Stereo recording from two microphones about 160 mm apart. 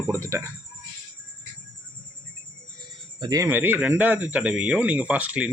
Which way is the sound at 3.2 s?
25° right (ahead or behind).